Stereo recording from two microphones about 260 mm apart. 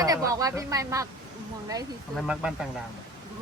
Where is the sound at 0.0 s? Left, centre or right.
Centre.